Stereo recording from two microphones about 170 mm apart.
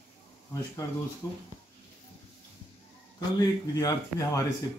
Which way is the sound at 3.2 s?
25° left (ahead or behind).